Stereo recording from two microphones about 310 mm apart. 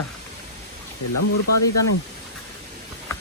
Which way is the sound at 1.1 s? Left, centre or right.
Left.